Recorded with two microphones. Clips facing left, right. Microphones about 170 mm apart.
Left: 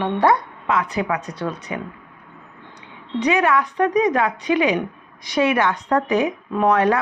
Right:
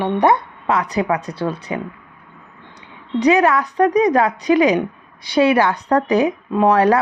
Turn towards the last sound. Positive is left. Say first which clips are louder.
# right 3 dB
turn(degrees=-35)  # may be behind; listen again after turning